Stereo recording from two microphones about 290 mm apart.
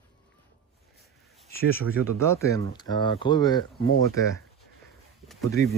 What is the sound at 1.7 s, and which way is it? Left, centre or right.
Speech, centre.